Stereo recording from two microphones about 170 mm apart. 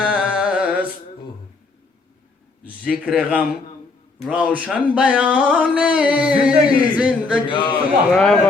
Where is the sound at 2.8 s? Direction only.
5° right (ahead or behind).